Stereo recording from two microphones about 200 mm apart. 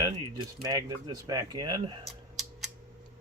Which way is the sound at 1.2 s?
20° right (ahead or behind).